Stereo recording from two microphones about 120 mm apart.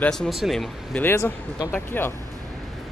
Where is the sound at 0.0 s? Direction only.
5° left (ahead or behind).